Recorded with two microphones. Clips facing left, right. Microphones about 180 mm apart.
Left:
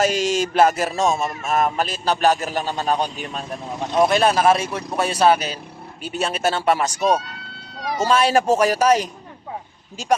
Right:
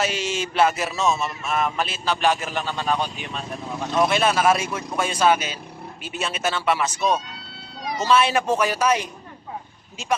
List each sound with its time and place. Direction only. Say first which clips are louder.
0.0 s a man's voice: left 6 dB; 45° left (ahead or behind)